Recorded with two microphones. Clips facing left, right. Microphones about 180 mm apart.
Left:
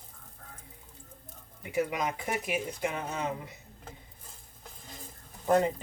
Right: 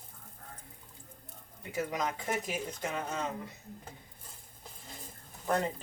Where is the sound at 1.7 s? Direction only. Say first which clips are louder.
Left 4 dB; 10° left (ahead or behind).